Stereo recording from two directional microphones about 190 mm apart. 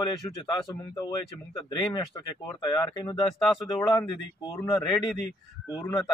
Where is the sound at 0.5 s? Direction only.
20° left (ahead or behind).